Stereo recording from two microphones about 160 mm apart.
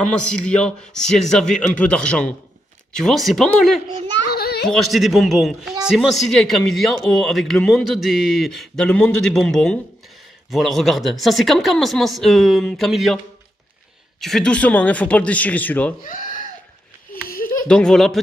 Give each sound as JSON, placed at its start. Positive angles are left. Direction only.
{"t": 0.5, "sound": "a man's voice", "side_deg": 5}
{"t": 4.1, "sound": "child singing", "side_deg": 85}
{"t": 4.6, "sound": "a man's voice", "side_deg": 0}
{"t": 14.2, "sound": "a man's voice", "side_deg": 5}
{"t": 16.0, "sound": "a sound", "side_deg": 55}
{"t": 17.6, "sound": "a man's voice", "side_deg": 5}